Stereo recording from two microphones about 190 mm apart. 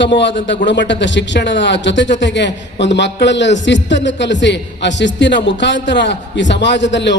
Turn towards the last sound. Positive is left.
turn(degrees=70)  # may be behind; listen again after turning